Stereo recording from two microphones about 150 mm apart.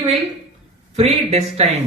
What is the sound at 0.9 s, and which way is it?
Speech, 45° right (ahead or behind).